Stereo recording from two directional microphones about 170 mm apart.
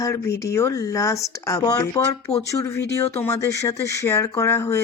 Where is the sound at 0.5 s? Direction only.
15° left (ahead or behind).